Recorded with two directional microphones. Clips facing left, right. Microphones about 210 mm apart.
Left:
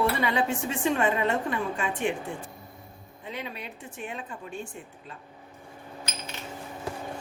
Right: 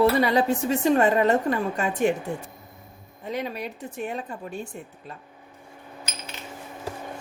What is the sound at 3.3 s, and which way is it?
A woman's voice, 40° right (ahead or behind).